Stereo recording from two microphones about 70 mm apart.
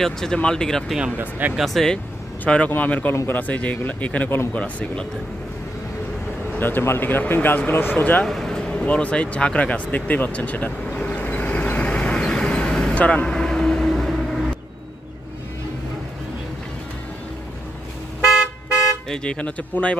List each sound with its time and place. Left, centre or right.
0.0 s speech: centre
1.1 s speech: right
1.5 s speech: centre
2.4 s speech: left
6.5 s speech: left
8.3 s vehicle: centre
19.0 s speech: centre